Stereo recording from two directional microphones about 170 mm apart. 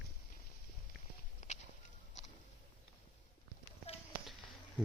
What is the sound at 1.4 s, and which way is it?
Walk, 45° left (ahead or behind).